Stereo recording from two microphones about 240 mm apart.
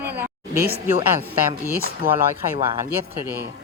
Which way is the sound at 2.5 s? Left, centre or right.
Right.